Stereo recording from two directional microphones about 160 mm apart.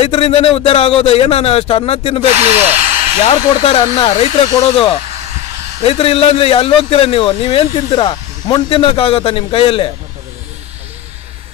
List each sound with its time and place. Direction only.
0.0 s a man's voice: 35° left (ahead or behind)
2.3 s speech: 40° right (ahead or behind)
3.3 s a man's voice: 35° left (ahead or behind)
5.9 s a man's voice: 35° left (ahead or behind)